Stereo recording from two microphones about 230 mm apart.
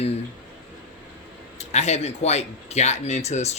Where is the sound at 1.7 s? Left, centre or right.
Left.